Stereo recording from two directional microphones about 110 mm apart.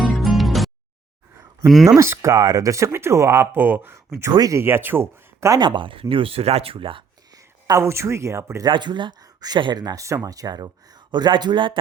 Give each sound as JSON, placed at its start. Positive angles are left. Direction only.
{"t": 0.2, "sound": "music", "side_deg": 0}
{"t": 1.7, "sound": "speech", "side_deg": 0}
{"t": 2.0, "sound": "speech", "side_deg": -25}
{"t": 4.3, "sound": "speech", "side_deg": -35}
{"t": 4.6, "sound": "speech", "side_deg": -20}
{"t": 5.5, "sound": "speech", "side_deg": -45}
{"t": 7.3, "sound": "speech", "side_deg": -30}
{"t": 8.6, "sound": "speech", "side_deg": -45}